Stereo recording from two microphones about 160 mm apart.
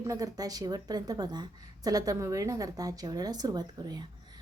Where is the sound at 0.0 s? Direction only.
20° right (ahead or behind).